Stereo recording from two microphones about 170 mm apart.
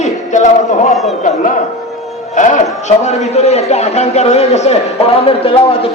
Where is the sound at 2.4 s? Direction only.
45° left (ahead or behind).